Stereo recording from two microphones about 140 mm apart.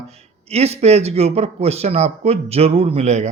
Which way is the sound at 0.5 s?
50° right (ahead or behind).